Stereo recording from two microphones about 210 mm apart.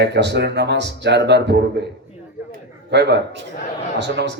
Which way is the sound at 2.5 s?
55° right (ahead or behind).